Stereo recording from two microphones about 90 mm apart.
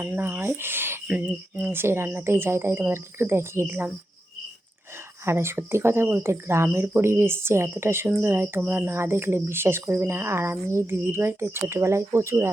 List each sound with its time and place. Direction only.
0.0 s speech: 25° right (ahead or behind)
5.2 s speech: 30° right (ahead or behind)